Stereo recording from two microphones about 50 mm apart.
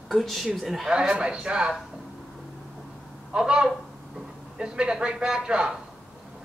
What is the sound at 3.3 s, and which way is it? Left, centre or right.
A man's voice, centre.